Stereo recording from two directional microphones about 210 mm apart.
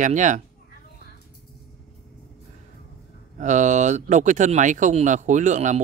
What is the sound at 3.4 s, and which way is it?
Speech, 35° right (ahead or behind).